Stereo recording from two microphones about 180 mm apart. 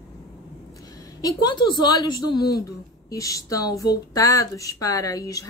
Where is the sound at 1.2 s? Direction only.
25° left (ahead or behind).